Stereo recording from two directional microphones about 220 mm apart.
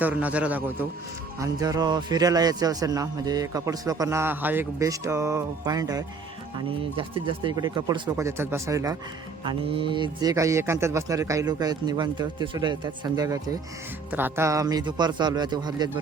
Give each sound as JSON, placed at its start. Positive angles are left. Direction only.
{"t": 0.0, "sound": "a man's voice", "side_deg": -5}